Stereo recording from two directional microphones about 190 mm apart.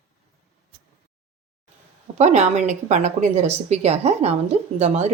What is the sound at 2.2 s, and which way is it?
Speech, 35° right (ahead or behind).